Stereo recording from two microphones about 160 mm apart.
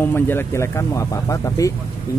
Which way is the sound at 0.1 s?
15° left (ahead or behind).